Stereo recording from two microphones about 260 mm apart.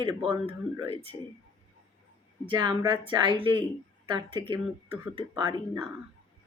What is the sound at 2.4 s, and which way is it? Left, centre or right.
A woman's voice, centre.